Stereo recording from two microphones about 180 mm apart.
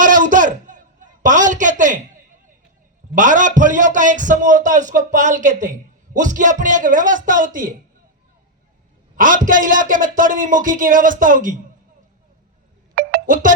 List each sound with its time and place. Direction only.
0.0 s a sound: 45° right (ahead or behind)
3.2 s a man's voice: 45° right (ahead or behind)
9.1 s a man's voice: 50° right (ahead or behind)
13.0 s music: 60° right (ahead or behind)